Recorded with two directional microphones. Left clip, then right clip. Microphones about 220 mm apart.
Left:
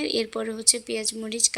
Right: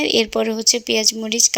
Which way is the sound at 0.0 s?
30° right (ahead or behind).